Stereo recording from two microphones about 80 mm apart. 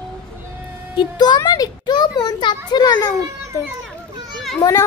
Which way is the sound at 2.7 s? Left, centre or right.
Left.